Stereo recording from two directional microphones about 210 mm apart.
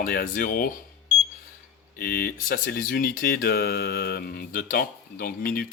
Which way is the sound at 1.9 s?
45° left (ahead or behind).